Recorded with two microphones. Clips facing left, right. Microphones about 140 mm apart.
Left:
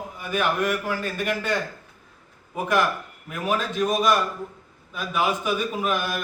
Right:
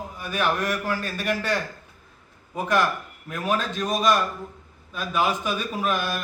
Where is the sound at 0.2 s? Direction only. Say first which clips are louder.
Left 1 dB; 15° left (ahead or behind).